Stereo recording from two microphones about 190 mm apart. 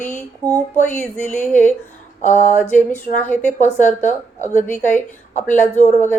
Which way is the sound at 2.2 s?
40° left (ahead or behind).